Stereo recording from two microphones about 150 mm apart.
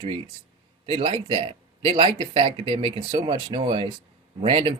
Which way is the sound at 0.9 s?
35° right (ahead or behind).